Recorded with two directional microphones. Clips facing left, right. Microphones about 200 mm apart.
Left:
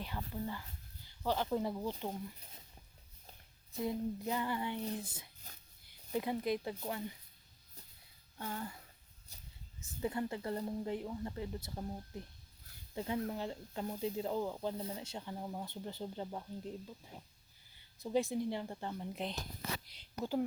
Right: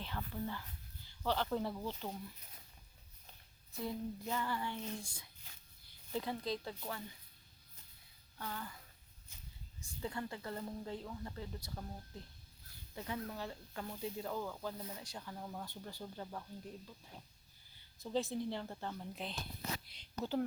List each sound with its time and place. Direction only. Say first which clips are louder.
0.0 s speech: left 1 dB; 10° left (ahead or behind)
3.8 s speech: left 4 dB; 20° left (ahead or behind)
8.4 s speech: left 3 dB; 25° left (ahead or behind)
9.3 s a sound: left 1 dB; 35° left (ahead or behind)
10.0 s speech: left 5 dB; 20° left (ahead or behind)